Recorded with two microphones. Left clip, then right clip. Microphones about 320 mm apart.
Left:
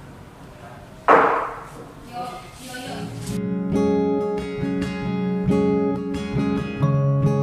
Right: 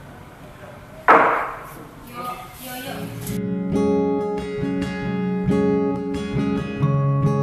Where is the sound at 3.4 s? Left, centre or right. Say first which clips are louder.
Even; centre.